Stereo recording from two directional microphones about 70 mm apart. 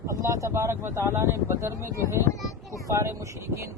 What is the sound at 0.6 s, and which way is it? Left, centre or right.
Speech, right.